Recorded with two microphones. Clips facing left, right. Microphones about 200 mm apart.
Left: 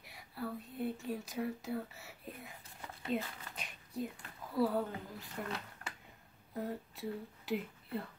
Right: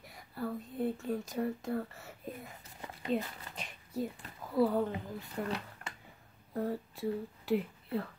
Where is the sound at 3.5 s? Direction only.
Centre (ahead or behind).